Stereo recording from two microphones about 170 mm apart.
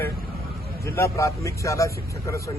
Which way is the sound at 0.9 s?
15° left (ahead or behind).